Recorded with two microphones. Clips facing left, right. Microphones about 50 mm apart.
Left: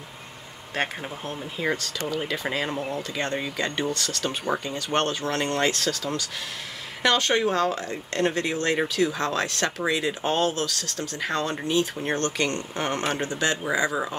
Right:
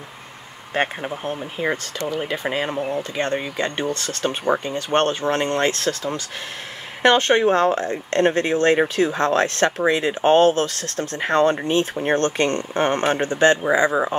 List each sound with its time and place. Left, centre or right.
0.7 s speech: right
3.3 s speech: centre
3.6 s speech: right